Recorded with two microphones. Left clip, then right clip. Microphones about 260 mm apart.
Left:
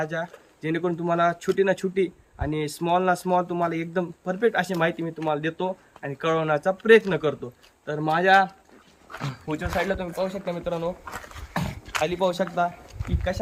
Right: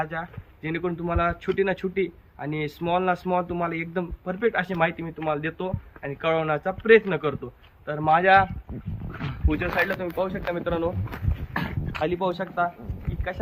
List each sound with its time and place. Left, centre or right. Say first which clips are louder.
0.0 s speech: left 1 dB; centre
9.2 s speech: right 2 dB; left
10.0 s speech: right 1 dB; left